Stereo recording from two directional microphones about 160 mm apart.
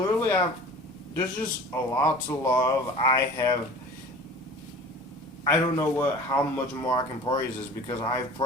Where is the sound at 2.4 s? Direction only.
25° left (ahead or behind).